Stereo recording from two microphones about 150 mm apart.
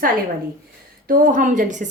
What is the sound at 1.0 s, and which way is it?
Speech, 65° right (ahead or behind).